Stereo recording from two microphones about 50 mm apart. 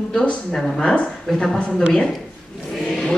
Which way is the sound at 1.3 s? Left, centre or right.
Centre.